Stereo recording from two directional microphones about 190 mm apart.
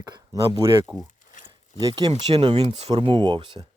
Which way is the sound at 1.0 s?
40° left (ahead or behind).